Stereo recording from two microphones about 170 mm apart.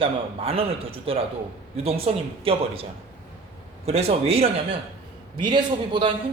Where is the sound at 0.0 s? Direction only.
35° right (ahead or behind).